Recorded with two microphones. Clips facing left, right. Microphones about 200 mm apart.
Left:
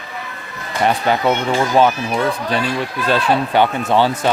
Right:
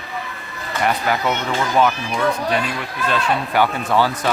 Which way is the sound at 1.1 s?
25° left (ahead or behind).